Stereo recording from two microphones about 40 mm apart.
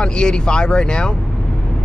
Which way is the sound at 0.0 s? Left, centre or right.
Left.